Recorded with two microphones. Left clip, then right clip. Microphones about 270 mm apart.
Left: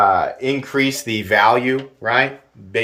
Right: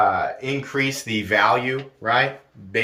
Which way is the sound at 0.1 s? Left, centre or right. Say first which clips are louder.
Left 6 dB; left.